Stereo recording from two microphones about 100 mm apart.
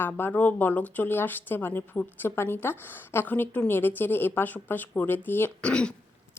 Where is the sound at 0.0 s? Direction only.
20° left (ahead or behind).